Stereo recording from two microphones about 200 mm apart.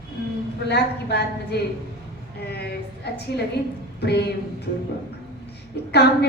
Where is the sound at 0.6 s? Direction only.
55° left (ahead or behind).